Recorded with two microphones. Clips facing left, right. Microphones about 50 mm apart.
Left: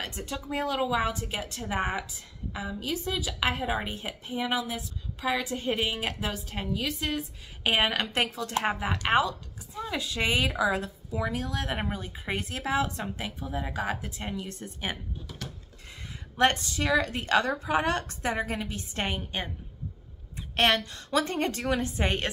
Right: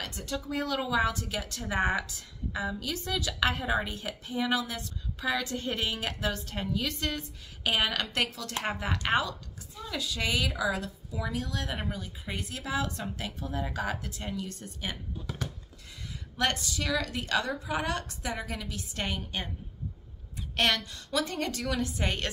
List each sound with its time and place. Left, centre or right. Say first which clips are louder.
0.0 s a woman's voice: even; left
7.6 s a woman's voice: left 3 dB; left
16.3 s a woman's voice: left 5 dB; left